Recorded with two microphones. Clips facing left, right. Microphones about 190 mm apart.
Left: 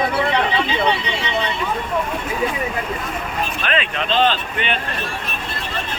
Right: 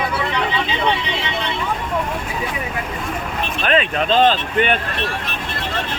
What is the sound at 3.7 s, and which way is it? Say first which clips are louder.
Speech: right 7 dB; 40° right (ahead or behind).